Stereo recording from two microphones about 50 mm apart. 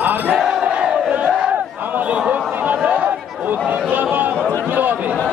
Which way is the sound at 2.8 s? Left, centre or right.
Right.